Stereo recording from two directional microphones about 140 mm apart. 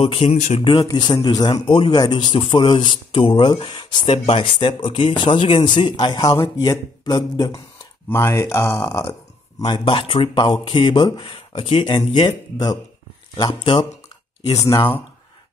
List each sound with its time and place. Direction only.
0.0 s a man's voice: 40° left (ahead or behind)
0.8 s a man's voice: 30° left (ahead or behind)
4.1 s speech: 50° left (ahead or behind)
4.6 s a man's voice: 35° left (ahead or behind); by 9.1 s 20° left (ahead or behind)
9.6 s a man's voice: 35° left (ahead or behind)